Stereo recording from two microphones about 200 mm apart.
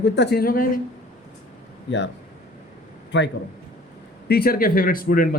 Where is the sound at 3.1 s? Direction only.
60° left (ahead or behind).